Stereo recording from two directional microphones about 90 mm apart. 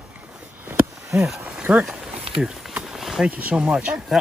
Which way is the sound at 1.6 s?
15° right (ahead or behind).